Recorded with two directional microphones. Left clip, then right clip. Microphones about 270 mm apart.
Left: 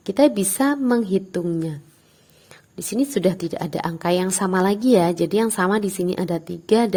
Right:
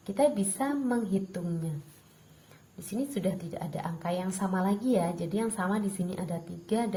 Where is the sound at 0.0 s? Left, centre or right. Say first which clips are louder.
Left 9 dB; left.